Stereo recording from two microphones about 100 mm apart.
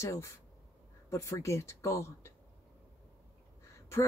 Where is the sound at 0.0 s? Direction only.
30° left (ahead or behind).